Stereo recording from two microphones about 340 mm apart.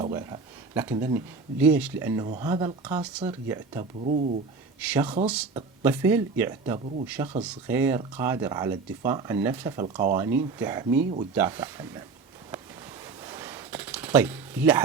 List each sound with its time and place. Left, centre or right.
0.0 s speech: centre
4.8 s speech: centre
13.0 s a sound: centre